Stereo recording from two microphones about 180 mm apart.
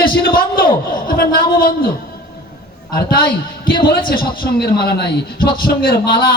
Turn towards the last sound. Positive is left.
turn(degrees=55)  # may be behind; listen again after turning